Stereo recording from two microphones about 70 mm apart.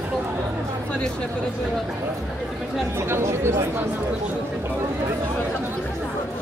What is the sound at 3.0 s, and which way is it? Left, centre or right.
Speech, right.